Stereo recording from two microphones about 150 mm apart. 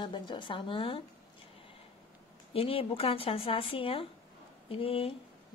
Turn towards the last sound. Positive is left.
turn(degrees=40)  # may be behind; listen again after turning